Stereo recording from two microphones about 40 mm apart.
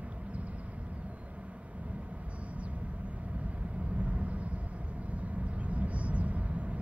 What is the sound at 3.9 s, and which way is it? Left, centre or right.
Vehicle, right.